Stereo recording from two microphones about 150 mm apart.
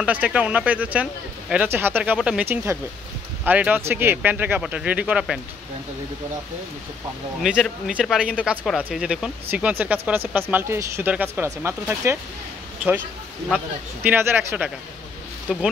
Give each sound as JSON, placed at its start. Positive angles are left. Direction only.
{"t": 0.0, "sound": "speech", "side_deg": -10}
{"t": 7.5, "sound": "speech", "side_deg": -5}
{"t": 14.0, "sound": "speech", "side_deg": -15}